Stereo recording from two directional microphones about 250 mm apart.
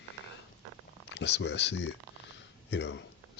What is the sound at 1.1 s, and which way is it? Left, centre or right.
Speech, left.